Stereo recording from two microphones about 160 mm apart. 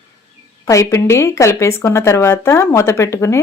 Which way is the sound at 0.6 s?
20° left (ahead or behind).